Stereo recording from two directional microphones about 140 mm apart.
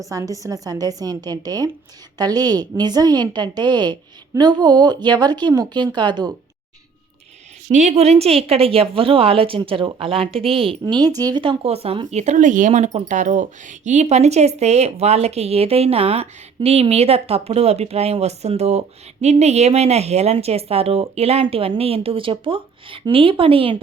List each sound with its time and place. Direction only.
0.0 s a woman's voice: 25° right (ahead or behind)
7.7 s a woman's voice: 55° right (ahead or behind); by 23.7 s 40° right (ahead or behind)